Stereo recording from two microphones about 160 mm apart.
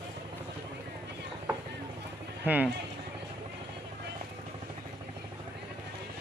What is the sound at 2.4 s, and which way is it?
Speech, 10° right (ahead or behind).